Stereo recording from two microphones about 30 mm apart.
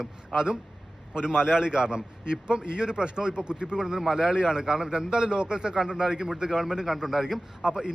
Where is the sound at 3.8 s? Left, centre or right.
Right.